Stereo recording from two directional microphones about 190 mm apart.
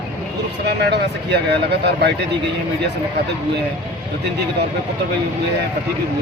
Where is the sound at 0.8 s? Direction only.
60° right (ahead or behind).